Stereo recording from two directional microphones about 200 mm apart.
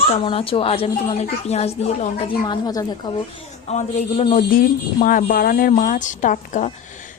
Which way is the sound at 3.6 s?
35° left (ahead or behind).